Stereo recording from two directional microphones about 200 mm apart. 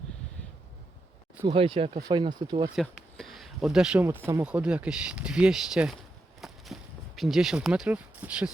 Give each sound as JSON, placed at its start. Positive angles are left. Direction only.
{"t": 1.5, "sound": "speech", "side_deg": -25}
{"t": 2.7, "sound": "speech", "side_deg": 0}
{"t": 6.4, "sound": "a sound", "side_deg": 0}
{"t": 7.2, "sound": "speech", "side_deg": 0}